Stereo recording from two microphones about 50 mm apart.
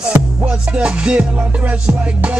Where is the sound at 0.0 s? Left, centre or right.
Right.